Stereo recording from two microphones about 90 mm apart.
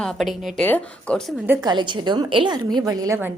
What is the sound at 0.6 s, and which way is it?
Speech, 20° left (ahead or behind).